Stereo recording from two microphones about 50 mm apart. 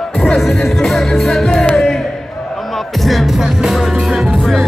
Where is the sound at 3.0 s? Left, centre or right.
Centre.